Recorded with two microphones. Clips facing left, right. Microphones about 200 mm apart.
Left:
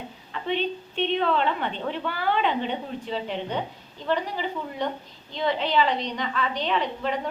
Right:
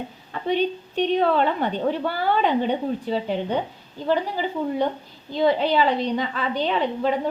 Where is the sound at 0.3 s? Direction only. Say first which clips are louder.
Right 4 dB; 40° right (ahead or behind).